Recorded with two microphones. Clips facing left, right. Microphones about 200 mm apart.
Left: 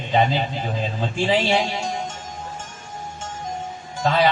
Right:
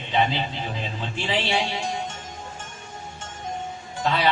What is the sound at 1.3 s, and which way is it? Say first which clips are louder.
Speech: left 5 dB; 45° left (ahead or behind).